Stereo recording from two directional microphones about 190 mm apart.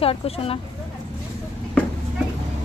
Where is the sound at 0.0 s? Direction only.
30° left (ahead or behind).